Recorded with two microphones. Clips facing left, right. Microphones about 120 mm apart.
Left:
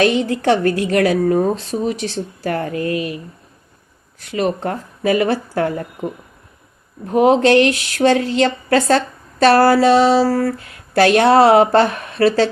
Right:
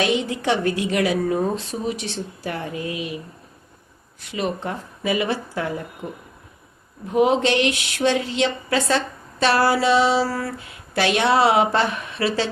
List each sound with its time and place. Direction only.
0.2 s speech: 45° left (ahead or behind)
2.5 s speech: 55° left (ahead or behind)
4.3 s speech: 50° left (ahead or behind)
7.1 s speech: 45° left (ahead or behind)